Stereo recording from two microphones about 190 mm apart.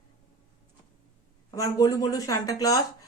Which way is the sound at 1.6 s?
20° left (ahead or behind).